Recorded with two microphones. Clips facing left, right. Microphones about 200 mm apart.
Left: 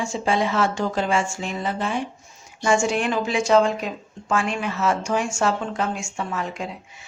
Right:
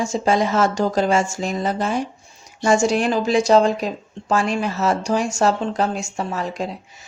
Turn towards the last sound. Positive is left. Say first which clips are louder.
# right 3 dB
turn(degrees=-35)  # may be behind; listen again after turning